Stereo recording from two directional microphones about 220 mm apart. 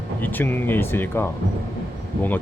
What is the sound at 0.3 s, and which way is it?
Speech, 10° left (ahead or behind).